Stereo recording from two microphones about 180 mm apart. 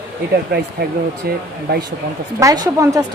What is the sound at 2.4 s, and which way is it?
Speech, 20° right (ahead or behind).